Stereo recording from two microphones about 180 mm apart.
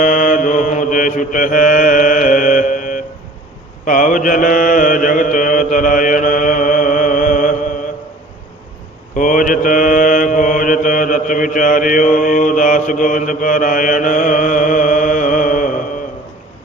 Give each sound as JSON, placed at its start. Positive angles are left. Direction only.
{"t": 0.0, "sound": "mantra", "side_deg": 45}
{"t": 9.1, "sound": "mantra", "side_deg": 50}